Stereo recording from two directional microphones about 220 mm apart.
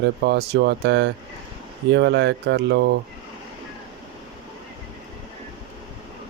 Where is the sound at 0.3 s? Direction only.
50° right (ahead or behind).